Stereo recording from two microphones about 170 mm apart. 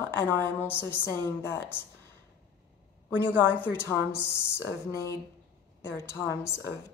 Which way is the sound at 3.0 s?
10° left (ahead or behind).